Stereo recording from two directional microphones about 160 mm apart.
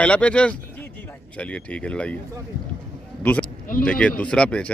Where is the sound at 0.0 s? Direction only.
5° left (ahead or behind).